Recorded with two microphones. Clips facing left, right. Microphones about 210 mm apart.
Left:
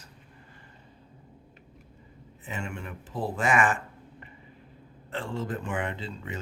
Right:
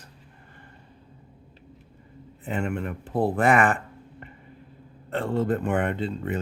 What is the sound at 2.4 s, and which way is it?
Speech, 60° right (ahead or behind).